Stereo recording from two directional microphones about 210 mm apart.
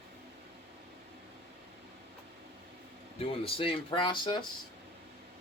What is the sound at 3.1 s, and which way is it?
Speech, 25° left (ahead or behind).